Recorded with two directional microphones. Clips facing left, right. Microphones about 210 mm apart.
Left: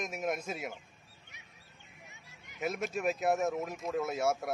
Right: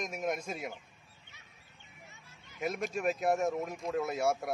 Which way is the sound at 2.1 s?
15° left (ahead or behind).